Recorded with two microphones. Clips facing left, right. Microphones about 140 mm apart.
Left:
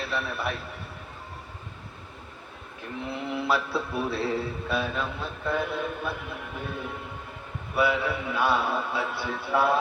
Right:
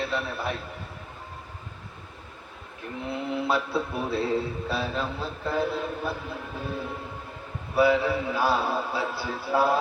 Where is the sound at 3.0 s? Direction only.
25° right (ahead or behind).